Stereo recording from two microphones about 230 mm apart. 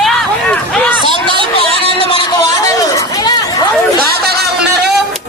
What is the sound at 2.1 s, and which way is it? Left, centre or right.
Chatter, centre.